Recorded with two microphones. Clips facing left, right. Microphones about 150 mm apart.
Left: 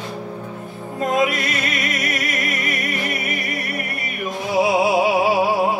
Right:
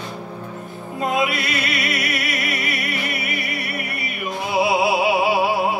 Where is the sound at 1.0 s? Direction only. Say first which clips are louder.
Left 2 dB; 45° left (ahead or behind).